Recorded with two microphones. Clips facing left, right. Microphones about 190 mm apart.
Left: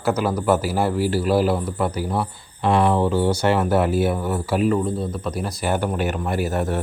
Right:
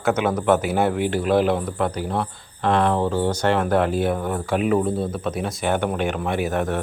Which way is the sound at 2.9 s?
15° right (ahead or behind).